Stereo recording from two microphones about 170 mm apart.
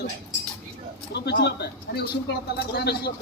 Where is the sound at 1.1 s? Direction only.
80° left.